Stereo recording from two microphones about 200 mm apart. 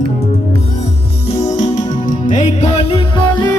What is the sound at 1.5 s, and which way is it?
Music, 35° left (ahead or behind).